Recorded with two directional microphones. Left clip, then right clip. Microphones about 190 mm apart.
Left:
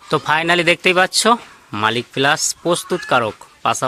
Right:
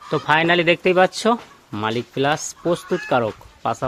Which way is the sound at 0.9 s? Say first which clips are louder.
Left 3 dB; centre (ahead or behind).